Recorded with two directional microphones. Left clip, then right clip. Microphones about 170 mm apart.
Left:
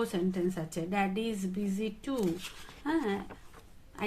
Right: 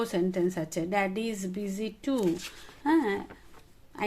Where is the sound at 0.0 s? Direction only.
50° right (ahead or behind).